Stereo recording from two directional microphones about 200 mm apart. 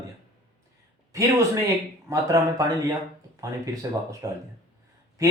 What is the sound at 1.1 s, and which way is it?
Speech, 15° right (ahead or behind).